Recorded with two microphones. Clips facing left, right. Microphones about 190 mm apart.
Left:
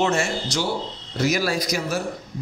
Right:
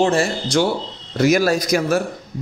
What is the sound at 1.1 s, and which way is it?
Speech, 55° right (ahead or behind).